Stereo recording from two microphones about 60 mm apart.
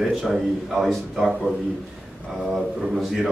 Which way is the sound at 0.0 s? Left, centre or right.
Centre.